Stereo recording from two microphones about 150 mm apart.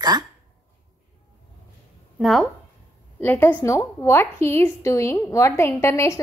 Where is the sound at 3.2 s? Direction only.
15° left (ahead or behind).